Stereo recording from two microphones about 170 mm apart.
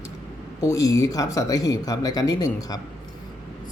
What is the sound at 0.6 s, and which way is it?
A man's voice, 20° left (ahead or behind).